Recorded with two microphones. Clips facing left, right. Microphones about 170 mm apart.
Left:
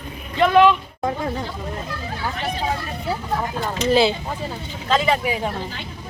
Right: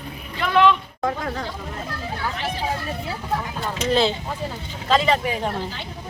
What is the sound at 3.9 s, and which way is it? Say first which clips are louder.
Speech: left 3 dB; 5° left (ahead or behind).